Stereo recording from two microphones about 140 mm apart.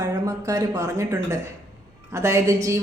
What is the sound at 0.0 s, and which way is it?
Speech, 25° right (ahead or behind).